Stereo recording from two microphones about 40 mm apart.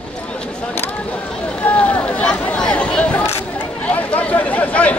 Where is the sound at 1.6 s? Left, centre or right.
Left.